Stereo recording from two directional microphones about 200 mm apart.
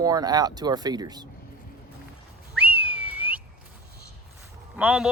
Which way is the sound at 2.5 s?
5° right (ahead or behind).